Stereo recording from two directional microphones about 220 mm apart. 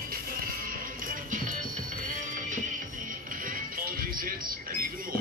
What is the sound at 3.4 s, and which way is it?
Music, 40° right (ahead or behind).